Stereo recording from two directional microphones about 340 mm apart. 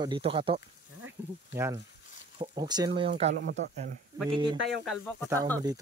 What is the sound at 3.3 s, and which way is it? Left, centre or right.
Speech, right.